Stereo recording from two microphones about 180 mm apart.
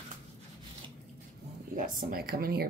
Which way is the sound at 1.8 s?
50° right (ahead or behind).